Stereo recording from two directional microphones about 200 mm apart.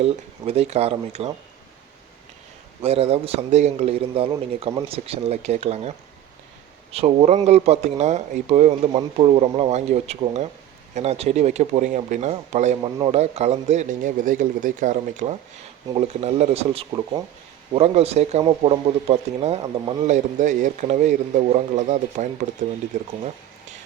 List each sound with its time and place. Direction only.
0.0 s a man's voice: 30° right (ahead or behind)
2.8 s a man's voice: 30° right (ahead or behind)
6.9 s a man's voice: 30° right (ahead or behind)
20.1 s a man's voice: 40° right (ahead or behind)